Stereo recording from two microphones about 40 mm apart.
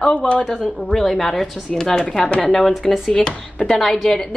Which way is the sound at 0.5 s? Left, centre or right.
Centre.